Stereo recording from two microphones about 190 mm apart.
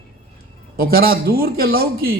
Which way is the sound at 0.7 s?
50° right (ahead or behind).